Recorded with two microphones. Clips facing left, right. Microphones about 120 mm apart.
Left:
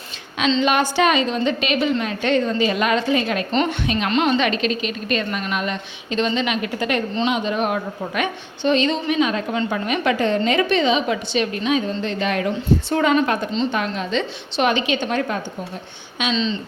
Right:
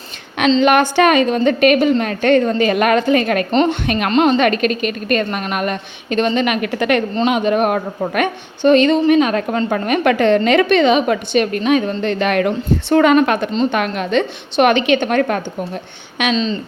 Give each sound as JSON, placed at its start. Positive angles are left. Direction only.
{"t": 0.6, "sound": "a woman's voice", "side_deg": -60}
{"t": 3.5, "sound": "a woman's voice", "side_deg": -40}
{"t": 3.8, "sound": "a woman's voice", "side_deg": -60}
{"t": 4.1, "sound": "a woman's voice", "side_deg": -45}
{"t": 7.2, "sound": "a woman's voice", "side_deg": -55}
{"t": 16.3, "sound": "a woman's voice", "side_deg": -45}